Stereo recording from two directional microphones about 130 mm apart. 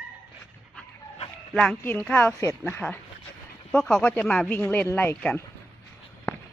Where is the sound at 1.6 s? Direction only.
10° left (ahead or behind).